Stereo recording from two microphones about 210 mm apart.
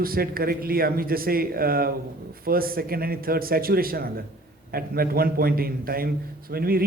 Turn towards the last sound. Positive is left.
turn(degrees=-45)  # may be behind; listen again after turning